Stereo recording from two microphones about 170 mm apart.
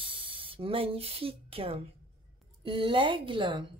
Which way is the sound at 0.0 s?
30° right (ahead or behind).